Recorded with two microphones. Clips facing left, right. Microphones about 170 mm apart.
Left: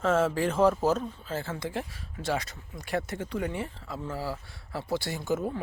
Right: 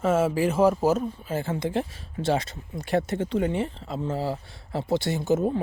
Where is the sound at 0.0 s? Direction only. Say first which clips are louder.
Right 3 dB; 10° right (ahead or behind).